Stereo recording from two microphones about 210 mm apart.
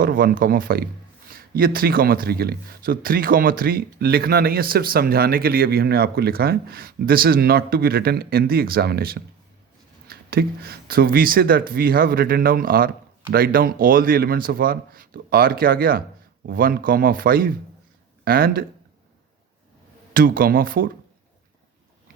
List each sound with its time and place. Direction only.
0.0 s speech: 45° right (ahead or behind)
20.1 s speech: 45° right (ahead or behind)